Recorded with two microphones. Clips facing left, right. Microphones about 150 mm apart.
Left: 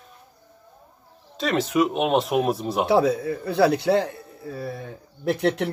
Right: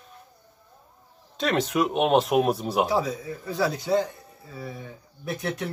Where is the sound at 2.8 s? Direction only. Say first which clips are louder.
Left 6 dB; 70° left (ahead or behind).